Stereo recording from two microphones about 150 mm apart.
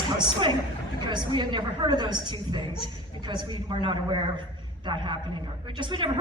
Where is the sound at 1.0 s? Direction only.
30° right (ahead or behind).